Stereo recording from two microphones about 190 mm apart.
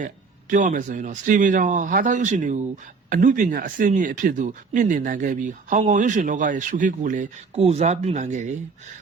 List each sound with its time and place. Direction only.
0.5 s speech: 40° right (ahead or behind)